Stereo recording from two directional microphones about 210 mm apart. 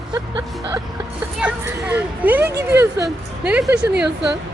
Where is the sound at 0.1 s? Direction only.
20° right (ahead or behind).